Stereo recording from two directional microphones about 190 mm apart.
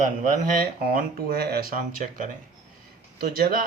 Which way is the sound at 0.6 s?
50° right (ahead or behind).